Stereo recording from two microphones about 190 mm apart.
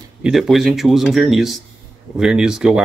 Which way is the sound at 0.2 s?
Centre (ahead or behind).